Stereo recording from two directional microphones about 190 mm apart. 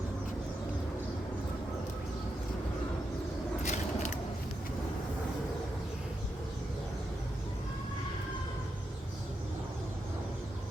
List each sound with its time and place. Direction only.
3.6 s vehicle: 40° left (ahead or behind)